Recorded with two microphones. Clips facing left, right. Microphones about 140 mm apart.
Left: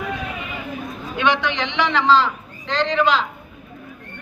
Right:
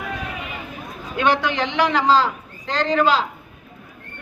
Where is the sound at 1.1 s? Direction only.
40° right (ahead or behind).